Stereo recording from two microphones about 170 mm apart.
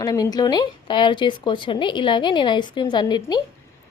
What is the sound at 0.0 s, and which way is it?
Speech, 20° left (ahead or behind).